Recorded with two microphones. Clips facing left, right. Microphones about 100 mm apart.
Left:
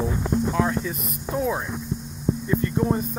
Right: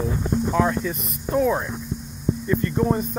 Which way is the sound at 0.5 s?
Centre (ahead or behind).